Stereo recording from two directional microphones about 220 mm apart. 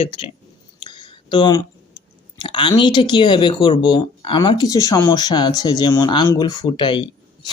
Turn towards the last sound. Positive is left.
turn(degrees=20)  # may be behind; listen again after turning